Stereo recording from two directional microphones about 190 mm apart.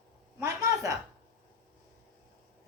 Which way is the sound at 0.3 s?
15° right (ahead or behind).